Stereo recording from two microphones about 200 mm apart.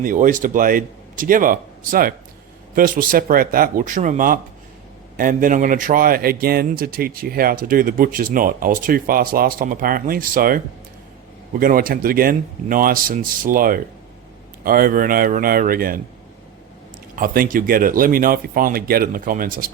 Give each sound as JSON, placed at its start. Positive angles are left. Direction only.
{"t": 0.0, "sound": "a man's voice", "side_deg": -40}
{"t": 11.6, "sound": "a man's voice", "side_deg": -45}
{"t": 17.2, "sound": "a man's voice", "side_deg": -45}